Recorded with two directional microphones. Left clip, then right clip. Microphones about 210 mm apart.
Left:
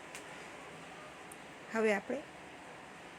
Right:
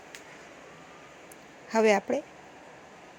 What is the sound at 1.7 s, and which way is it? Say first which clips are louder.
Speech: right 9 dB; 30° right (ahead or behind).